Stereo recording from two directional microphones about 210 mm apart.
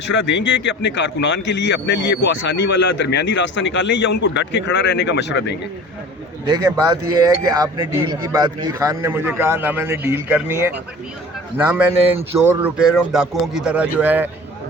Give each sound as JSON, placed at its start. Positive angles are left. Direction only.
{"t": 0.0, "sound": "a man's voice", "side_deg": 60}
{"t": 6.4, "sound": "speech", "side_deg": -20}